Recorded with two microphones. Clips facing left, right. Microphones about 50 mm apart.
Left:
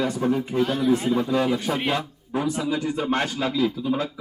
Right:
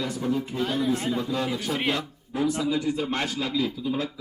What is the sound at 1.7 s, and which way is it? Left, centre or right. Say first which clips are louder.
A man's voice: left 2 dB; left.